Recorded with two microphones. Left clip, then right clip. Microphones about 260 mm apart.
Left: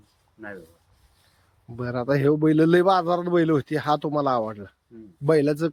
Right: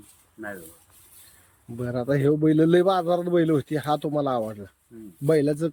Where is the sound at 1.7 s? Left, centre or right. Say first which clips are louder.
Left 1 dB; centre.